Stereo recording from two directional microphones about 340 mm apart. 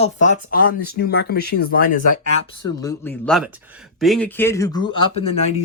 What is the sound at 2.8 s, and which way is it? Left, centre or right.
Speech, centre.